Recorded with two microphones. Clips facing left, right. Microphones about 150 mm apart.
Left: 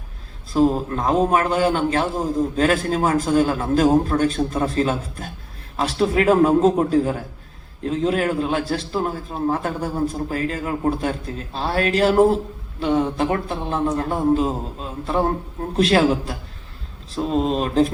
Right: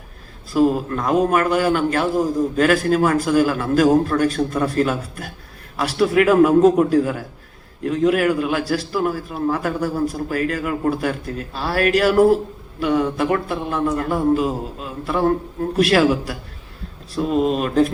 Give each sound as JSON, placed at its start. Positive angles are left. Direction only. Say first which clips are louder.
{"t": 0.5, "sound": "speech", "louder": "right 1 dB", "side_deg": 30}
{"t": 17.3, "sound": "speech", "louder": "right 1 dB", "side_deg": 35}